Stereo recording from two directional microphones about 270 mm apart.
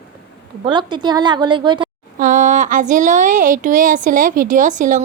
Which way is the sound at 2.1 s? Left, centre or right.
Right.